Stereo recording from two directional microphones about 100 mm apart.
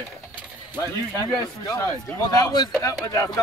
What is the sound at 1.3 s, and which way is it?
Speech, 40° left (ahead or behind).